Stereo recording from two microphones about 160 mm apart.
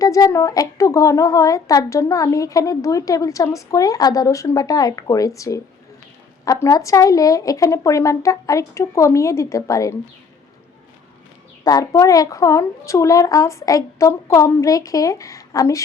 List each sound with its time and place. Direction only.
0.0 s a woman's voice: 20° left (ahead or behind)
11.6 s a woman's voice: 20° left (ahead or behind)